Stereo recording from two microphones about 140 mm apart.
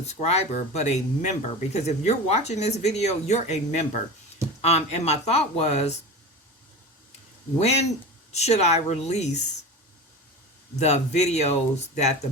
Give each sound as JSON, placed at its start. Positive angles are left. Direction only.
{"t": 0.1, "sound": "speech", "side_deg": 50}
{"t": 7.6, "sound": "speech", "side_deg": 50}
{"t": 10.8, "sound": "speech", "side_deg": 55}